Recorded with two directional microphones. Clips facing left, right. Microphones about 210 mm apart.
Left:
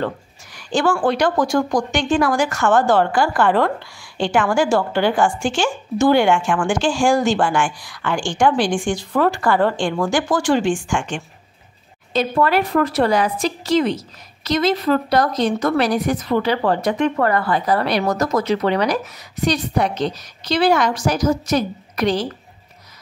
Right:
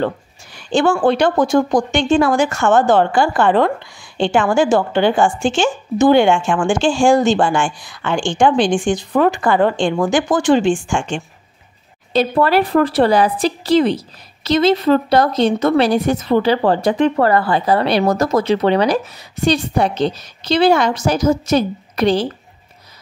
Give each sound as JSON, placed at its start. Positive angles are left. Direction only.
{"t": 0.6, "sound": "a woman's voice", "side_deg": -25}